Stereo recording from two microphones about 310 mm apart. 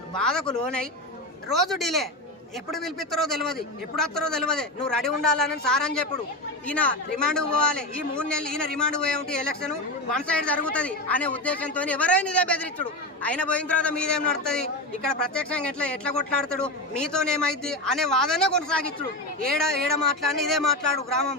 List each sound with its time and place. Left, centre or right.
0.2 s a man's voice: centre
1.5 s a man's voice: centre